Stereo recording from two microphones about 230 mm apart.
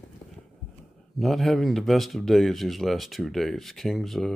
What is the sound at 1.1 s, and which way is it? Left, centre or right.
Speech, centre.